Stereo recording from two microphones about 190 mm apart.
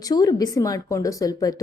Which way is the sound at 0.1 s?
20° left (ahead or behind).